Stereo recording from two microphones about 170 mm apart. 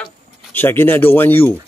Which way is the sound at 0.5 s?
10° left (ahead or behind).